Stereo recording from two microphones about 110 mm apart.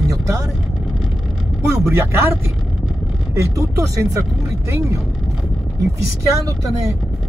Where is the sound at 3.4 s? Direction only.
30° right (ahead or behind).